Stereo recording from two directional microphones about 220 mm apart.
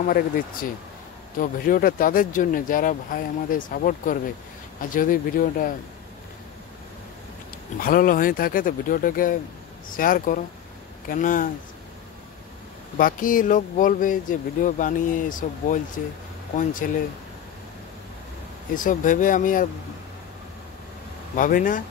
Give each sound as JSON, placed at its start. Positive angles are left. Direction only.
{"t": 0.0, "sound": "speech", "side_deg": 40}
{"t": 7.8, "sound": "speech", "side_deg": 40}
{"t": 12.9, "sound": "speech", "side_deg": 40}
{"t": 18.8, "sound": "speech", "side_deg": 35}
{"t": 21.4, "sound": "speech", "side_deg": 40}